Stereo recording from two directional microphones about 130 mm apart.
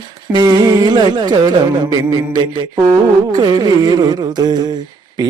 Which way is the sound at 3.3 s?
35° right (ahead or behind).